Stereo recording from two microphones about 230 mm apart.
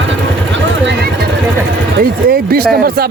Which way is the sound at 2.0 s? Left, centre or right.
Right.